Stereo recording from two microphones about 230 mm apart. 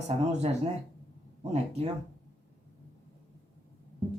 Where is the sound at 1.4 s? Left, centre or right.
Right.